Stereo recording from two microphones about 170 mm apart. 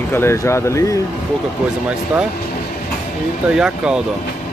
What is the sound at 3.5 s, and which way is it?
Speech, 5° right (ahead or behind).